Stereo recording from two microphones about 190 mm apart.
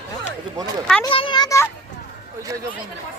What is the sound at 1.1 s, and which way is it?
Speech, 25° left (ahead or behind).